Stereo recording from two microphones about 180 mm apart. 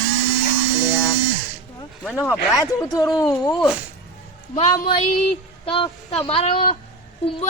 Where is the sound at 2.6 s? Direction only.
20° left (ahead or behind).